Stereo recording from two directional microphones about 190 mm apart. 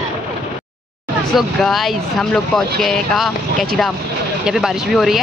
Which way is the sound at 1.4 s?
Centre (ahead or behind).